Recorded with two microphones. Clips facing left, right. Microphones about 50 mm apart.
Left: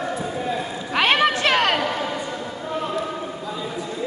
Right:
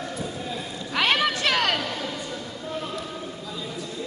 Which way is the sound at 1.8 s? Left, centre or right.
Left.